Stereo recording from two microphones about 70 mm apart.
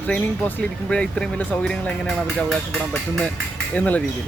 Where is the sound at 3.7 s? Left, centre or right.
Left.